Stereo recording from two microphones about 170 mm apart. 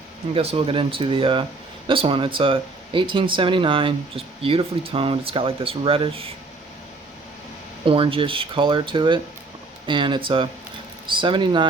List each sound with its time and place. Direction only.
0.3 s speech: 35° right (ahead or behind)
7.9 s speech: 30° right (ahead or behind)